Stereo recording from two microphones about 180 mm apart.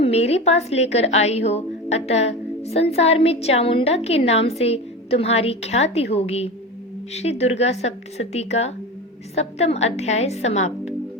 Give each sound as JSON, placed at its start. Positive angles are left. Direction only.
{"t": 0.0, "sound": "a woman's voice", "side_deg": 35}